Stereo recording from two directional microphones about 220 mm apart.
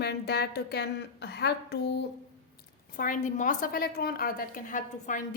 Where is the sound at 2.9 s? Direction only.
35° left (ahead or behind).